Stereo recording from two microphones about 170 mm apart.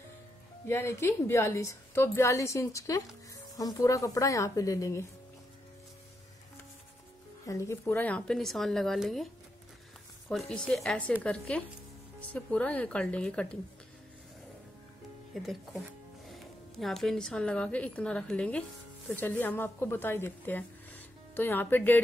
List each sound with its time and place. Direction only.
0.7 s a woman's voice: 15° left (ahead or behind)
7.4 s speech: 15° left (ahead or behind); by 9.3 s centre (ahead or behind)
10.5 s a woman's voice: 5° left (ahead or behind)
15.3 s a woman's voice: centre (ahead or behind)